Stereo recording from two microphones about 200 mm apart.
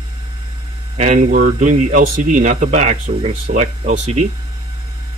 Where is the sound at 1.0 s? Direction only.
40° right (ahead or behind).